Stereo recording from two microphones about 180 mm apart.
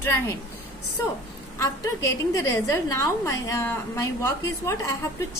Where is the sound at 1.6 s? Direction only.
20° left (ahead or behind).